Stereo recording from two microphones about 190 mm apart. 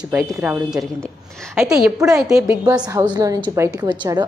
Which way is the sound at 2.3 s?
15° right (ahead or behind).